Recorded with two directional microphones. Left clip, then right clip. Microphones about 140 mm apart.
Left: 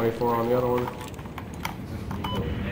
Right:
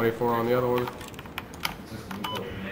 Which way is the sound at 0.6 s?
20° right (ahead or behind).